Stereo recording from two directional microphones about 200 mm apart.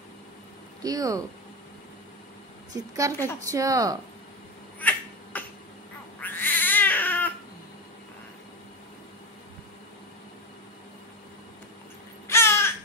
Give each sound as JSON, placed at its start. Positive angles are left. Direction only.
{"t": 0.8, "sound": "speech", "side_deg": -15}
{"t": 3.0, "sound": "speech", "side_deg": -15}
{"t": 4.7, "sound": "a sound", "side_deg": 10}
{"t": 6.2, "sound": "cat", "side_deg": 10}
{"t": 12.3, "sound": "caw", "side_deg": 10}